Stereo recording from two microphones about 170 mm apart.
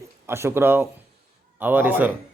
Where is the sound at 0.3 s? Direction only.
15° right (ahead or behind).